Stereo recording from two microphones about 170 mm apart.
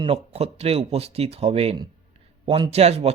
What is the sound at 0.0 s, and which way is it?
A man's voice, 35° right (ahead or behind).